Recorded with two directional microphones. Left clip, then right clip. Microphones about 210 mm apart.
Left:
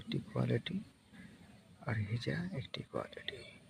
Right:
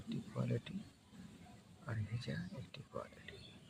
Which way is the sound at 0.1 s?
25° left (ahead or behind).